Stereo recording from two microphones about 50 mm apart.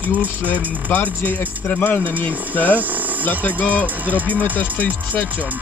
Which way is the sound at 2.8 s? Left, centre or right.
Right.